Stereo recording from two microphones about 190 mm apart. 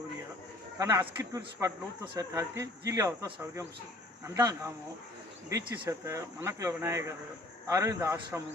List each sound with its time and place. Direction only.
0.8 s speech: 15° right (ahead or behind)